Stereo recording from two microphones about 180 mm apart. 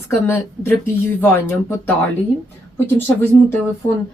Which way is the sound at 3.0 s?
10° left (ahead or behind).